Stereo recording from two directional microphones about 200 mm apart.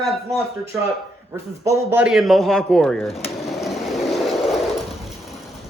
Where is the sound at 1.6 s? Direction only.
15° right (ahead or behind).